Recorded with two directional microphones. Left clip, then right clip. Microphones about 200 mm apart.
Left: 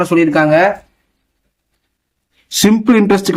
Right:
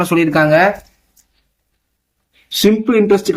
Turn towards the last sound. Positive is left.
turn(degrees=40)  # may be behind; listen again after turning